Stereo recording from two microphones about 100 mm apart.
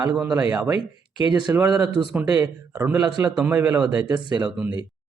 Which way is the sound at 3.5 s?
20° right (ahead or behind).